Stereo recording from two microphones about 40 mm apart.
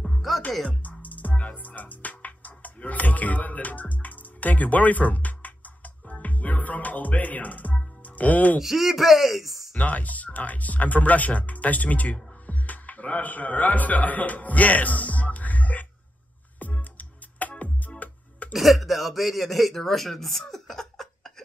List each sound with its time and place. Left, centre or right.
0.3 s music: centre
0.7 s music: left
8.2 s speech: left
8.5 s speech: centre
9.8 s speech: left
16.5 s music: left
18.5 s speech: centre